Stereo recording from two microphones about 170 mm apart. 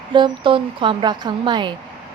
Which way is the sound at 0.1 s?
30° right (ahead or behind).